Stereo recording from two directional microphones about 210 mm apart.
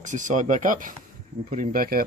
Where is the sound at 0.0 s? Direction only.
35° right (ahead or behind).